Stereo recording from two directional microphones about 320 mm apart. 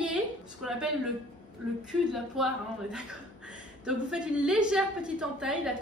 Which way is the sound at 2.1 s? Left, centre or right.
Centre.